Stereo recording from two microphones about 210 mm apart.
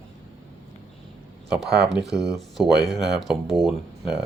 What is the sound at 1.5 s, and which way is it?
Speech, centre (ahead or behind).